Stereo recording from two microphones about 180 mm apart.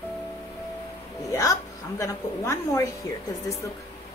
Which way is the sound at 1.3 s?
20° left (ahead or behind).